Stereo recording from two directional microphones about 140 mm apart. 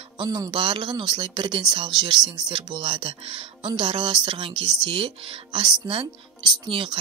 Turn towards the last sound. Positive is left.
turn(degrees=-35)  # may be behind; listen again after turning